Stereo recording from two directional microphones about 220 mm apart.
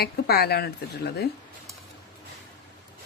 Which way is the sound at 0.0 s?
45° left (ahead or behind).